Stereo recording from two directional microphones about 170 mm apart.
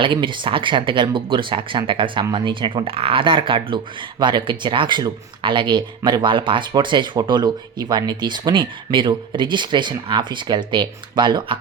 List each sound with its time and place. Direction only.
0.0 s speech: 30° right (ahead or behind)